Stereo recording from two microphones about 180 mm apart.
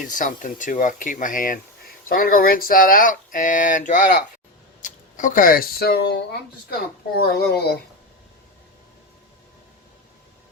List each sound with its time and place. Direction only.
0.1 s speech: 45° left (ahead or behind); by 7.8 s 65° left (ahead or behind)